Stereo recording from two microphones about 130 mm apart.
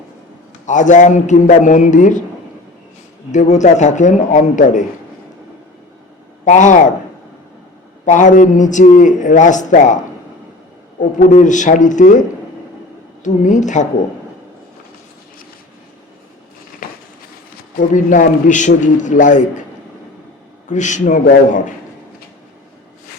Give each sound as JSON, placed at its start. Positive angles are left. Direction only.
{"t": 0.6, "sound": "a man's voice", "side_deg": 70}
{"t": 3.3, "sound": "a man's voice", "side_deg": 65}
{"t": 6.4, "sound": "a man's voice", "side_deg": 75}
{"t": 8.0, "sound": "a man's voice", "side_deg": 75}
{"t": 11.0, "sound": "a man's voice", "side_deg": 75}
{"t": 13.2, "sound": "a man's voice", "side_deg": 70}
{"t": 16.8, "sound": "a sound", "side_deg": 90}
{"t": 17.7, "sound": "a man's voice", "side_deg": 80}
{"t": 20.7, "sound": "a man's voice", "side_deg": 70}